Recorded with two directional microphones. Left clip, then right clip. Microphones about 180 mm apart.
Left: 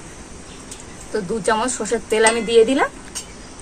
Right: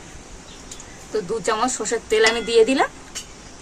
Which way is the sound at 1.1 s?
40° right (ahead or behind).